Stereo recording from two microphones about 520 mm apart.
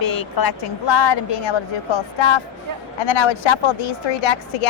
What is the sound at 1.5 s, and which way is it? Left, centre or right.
A woman's voice, left.